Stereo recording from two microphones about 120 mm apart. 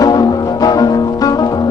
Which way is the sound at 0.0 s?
35° left (ahead or behind).